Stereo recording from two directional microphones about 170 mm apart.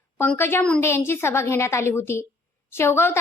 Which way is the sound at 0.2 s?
15° left (ahead or behind).